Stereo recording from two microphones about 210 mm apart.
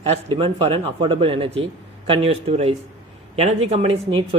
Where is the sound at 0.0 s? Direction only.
30° right (ahead or behind).